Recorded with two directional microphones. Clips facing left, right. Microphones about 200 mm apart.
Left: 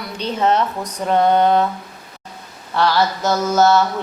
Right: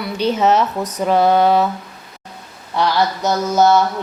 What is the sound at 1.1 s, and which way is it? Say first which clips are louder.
Mantra: right 1 dB; 5° right (ahead or behind).